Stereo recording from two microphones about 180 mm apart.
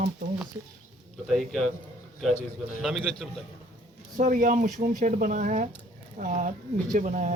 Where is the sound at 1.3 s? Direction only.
Centre (ahead or behind).